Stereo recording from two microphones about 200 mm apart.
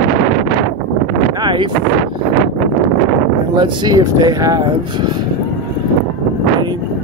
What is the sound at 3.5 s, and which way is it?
Speech, 20° right (ahead or behind).